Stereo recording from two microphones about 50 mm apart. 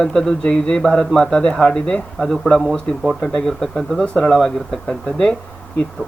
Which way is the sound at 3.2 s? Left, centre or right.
Centre.